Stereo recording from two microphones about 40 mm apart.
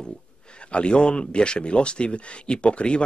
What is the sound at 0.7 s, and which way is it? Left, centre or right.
Speech, left.